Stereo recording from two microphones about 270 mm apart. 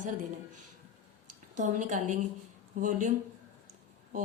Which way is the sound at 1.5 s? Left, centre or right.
Right.